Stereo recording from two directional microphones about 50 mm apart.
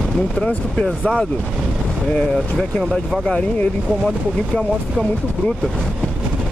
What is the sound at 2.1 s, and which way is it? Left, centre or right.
Speech, centre.